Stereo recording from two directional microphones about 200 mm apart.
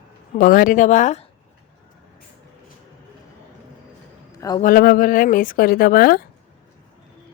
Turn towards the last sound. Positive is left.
turn(degrees=50)  # may be behind; listen again after turning